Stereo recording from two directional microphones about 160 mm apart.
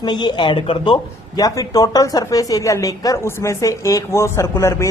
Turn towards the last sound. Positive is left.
turn(degrees=20)  # may be behind; listen again after turning